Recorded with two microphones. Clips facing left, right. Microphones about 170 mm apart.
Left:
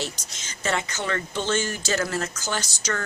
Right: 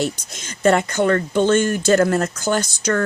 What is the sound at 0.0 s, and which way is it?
Speech, 55° right (ahead or behind).